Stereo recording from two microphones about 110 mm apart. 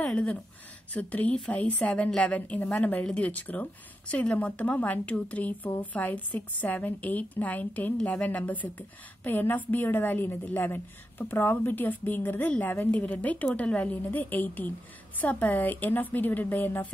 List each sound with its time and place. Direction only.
0.0 s a woman's voice: 10° left (ahead or behind)